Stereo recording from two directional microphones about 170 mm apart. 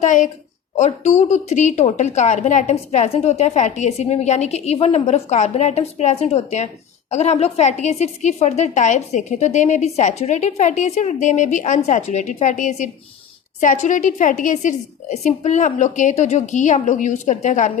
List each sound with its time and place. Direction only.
0.0 s a woman's voice: 50° left (ahead or behind)